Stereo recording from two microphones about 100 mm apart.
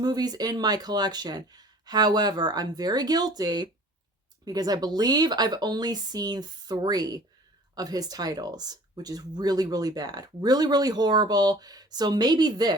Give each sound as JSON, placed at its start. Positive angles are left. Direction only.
{"t": 0.0, "sound": "speech", "side_deg": -40}